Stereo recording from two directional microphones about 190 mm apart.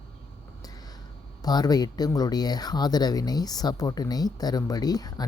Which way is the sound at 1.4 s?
20° left (ahead or behind).